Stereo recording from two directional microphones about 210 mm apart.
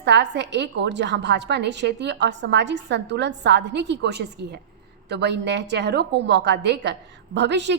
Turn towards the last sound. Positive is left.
turn(degrees=-55)  # may be behind; listen again after turning